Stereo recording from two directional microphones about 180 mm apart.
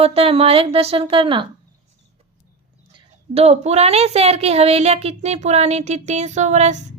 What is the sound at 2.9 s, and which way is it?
Speech, 35° right (ahead or behind).